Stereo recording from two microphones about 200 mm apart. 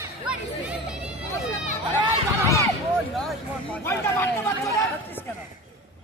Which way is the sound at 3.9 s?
10° left (ahead or behind).